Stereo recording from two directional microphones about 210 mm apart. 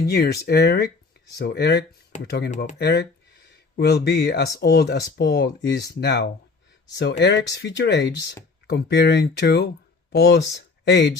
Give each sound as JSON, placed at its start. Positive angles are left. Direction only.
{"t": 0.0, "sound": "speech", "side_deg": 50}